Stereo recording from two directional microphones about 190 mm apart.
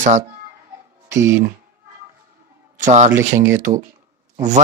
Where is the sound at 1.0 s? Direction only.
15° right (ahead or behind).